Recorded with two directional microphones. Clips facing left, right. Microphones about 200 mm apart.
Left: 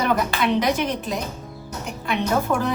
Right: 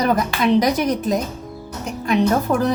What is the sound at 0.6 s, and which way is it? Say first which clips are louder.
Speech: right 4 dB; 40° right (ahead or behind).